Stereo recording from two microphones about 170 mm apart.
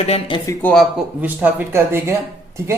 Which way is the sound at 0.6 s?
10° left (ahead or behind).